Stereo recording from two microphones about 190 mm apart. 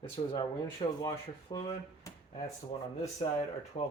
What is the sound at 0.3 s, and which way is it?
Speech, 25° left (ahead or behind).